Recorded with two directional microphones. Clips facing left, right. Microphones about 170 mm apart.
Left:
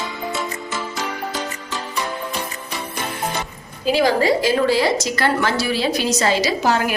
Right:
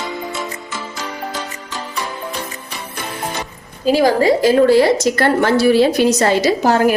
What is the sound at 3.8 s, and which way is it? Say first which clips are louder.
A woman's voice: right 4 dB; 45° right (ahead or behind).